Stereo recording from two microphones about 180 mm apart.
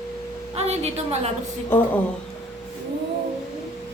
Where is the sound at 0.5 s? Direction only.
35° right (ahead or behind).